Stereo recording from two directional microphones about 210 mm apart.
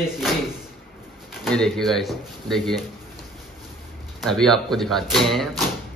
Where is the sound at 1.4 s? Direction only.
5° left (ahead or behind).